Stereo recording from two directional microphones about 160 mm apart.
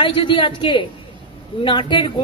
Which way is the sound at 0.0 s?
30° left (ahead or behind).